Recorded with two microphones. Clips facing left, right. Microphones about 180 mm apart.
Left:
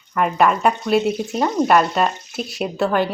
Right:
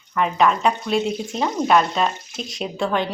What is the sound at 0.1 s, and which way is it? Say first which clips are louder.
Speech: left 2 dB; 5° left (ahead or behind).